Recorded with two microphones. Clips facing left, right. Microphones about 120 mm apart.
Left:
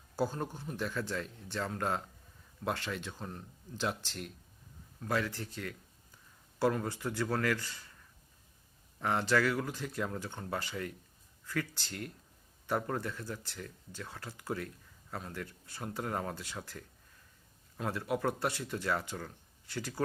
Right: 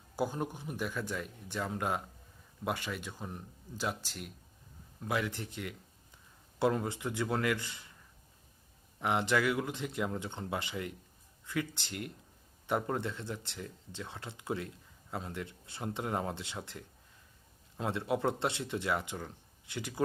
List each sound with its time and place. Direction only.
0.2 s a man's voice: 15° right (ahead or behind)
9.0 s speech: 15° right (ahead or behind)